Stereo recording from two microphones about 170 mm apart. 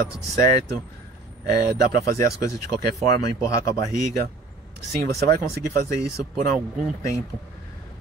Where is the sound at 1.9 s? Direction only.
65° right (ahead or behind).